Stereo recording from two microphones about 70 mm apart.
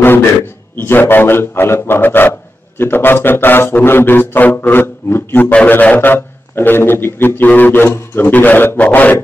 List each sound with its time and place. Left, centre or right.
0.8 s a man's voice: left